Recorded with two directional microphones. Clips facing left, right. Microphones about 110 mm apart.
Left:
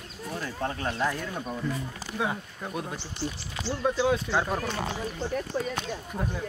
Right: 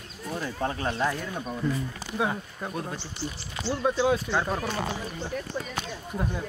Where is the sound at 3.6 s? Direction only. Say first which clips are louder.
Right 1 dB; centre (ahead or behind).